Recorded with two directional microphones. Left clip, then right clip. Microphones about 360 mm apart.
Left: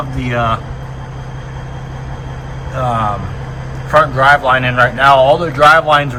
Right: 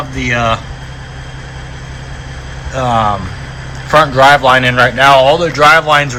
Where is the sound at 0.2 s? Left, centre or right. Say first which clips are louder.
Right 3 dB; centre.